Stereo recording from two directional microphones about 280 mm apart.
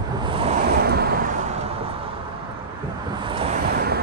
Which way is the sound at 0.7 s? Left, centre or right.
Right.